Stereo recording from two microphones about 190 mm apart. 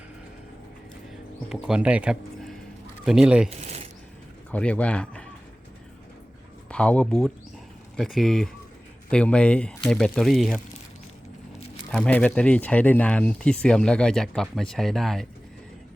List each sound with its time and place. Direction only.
1.5 s speech: 5° right (ahead or behind)
3.6 s a sound: 35° right (ahead or behind)
4.5 s speech: 5° left (ahead or behind)
6.7 s speech: 5° left (ahead or behind)
11.9 s speech: 5° left (ahead or behind)